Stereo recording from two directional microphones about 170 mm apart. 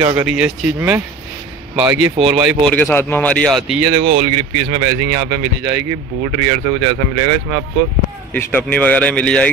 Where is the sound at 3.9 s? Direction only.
35° right (ahead or behind).